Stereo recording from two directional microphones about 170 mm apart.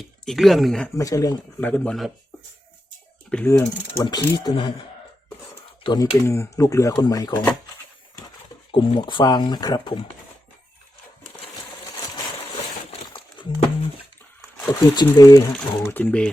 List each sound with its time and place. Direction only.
0.0 s speech: centre (ahead or behind)
0.9 s speech: 20° left (ahead or behind)
3.5 s speech: 20° left (ahead or behind)
5.8 s speech: 25° left (ahead or behind)
8.7 s speech: 30° left (ahead or behind)
12.9 s a sound: 30° left (ahead or behind)
14.7 s speech: 20° left (ahead or behind)